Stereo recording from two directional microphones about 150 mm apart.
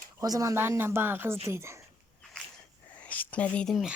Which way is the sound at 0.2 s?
20° right (ahead or behind).